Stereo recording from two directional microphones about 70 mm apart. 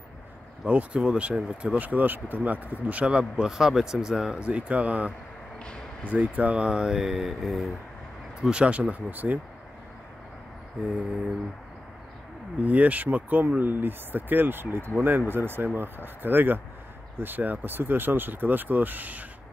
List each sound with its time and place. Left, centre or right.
0.7 s speech: centre
12.6 s speech: right